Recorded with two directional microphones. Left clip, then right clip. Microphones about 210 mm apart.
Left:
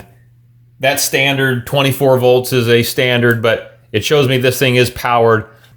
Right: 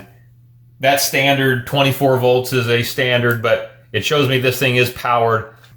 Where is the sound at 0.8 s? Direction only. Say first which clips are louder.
Left 1 dB; 45° left (ahead or behind).